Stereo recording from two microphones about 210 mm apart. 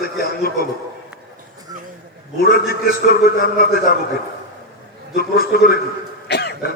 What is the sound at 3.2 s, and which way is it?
Speech, 45° left (ahead or behind).